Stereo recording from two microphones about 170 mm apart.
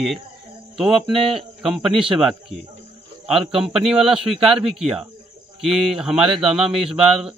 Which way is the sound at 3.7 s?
5° right (ahead or behind).